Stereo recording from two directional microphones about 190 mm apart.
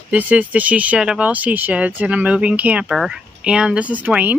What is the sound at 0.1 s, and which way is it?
Speech, 10° right (ahead or behind).